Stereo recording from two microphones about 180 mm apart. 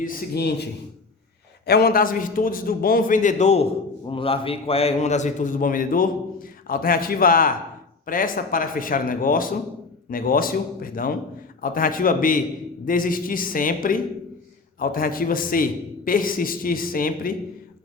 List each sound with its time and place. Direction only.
0.0 s a man's voice: 65° left (ahead or behind)
1.6 s a man's voice: 60° left (ahead or behind)